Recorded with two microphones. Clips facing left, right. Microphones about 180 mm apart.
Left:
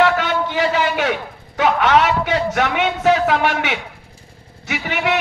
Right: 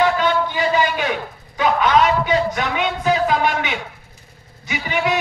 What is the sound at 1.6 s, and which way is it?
A man's voice, 80° left.